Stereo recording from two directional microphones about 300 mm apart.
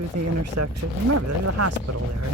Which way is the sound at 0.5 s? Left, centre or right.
Right.